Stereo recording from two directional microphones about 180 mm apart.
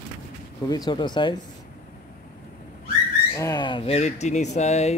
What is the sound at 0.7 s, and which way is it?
Speech, 25° left (ahead or behind).